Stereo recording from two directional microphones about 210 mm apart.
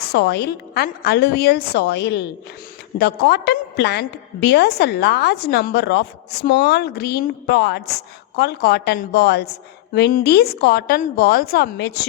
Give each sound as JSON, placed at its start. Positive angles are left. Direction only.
{"t": 0.0, "sound": "a woman's voice", "side_deg": 50}